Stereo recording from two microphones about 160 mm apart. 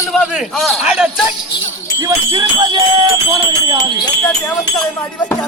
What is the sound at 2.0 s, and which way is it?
Speech, 20° right (ahead or behind).